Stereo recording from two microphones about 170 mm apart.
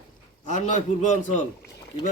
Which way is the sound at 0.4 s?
45° left (ahead or behind).